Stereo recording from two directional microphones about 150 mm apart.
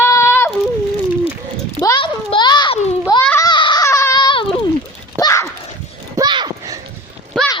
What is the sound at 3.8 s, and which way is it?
Baby cry, 20° left (ahead or behind).